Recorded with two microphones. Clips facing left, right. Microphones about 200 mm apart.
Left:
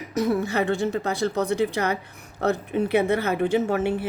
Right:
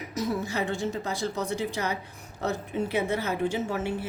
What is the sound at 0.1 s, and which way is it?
Speech, 60° left (ahead or behind).